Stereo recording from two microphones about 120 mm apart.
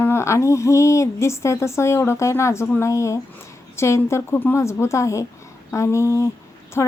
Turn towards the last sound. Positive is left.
turn(degrees=20)  # may be behind; listen again after turning